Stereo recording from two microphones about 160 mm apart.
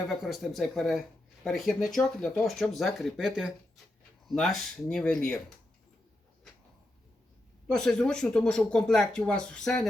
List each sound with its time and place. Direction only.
0.1 s speech: centre (ahead or behind)
7.7 s speech: 5° left (ahead or behind)